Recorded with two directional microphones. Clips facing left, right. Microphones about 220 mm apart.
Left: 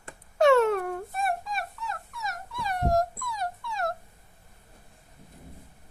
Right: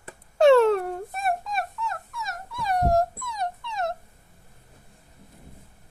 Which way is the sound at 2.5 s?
40° right (ahead or behind).